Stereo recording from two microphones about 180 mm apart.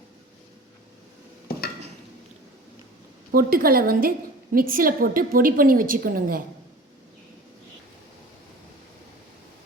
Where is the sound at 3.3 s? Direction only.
55° right (ahead or behind).